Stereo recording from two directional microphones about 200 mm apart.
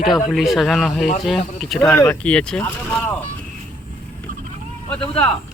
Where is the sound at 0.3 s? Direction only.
Centre (ahead or behind).